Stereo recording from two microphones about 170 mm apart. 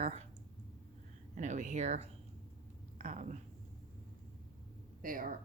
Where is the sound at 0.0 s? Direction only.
40° right (ahead or behind).